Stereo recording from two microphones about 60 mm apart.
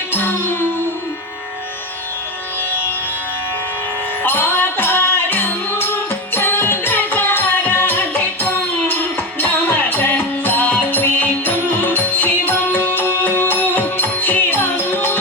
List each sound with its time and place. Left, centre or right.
0.1 s music: left
4.2 s music: left